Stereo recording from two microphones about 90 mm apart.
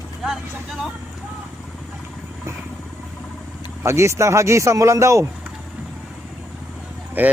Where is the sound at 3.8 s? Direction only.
30° right (ahead or behind).